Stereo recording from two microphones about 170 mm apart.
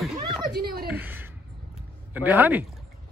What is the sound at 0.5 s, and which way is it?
Speech, 65° right (ahead or behind).